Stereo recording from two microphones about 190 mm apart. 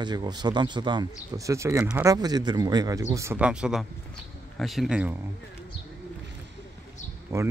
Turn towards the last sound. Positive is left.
turn(degrees=-15)  # may be behind; listen again after turning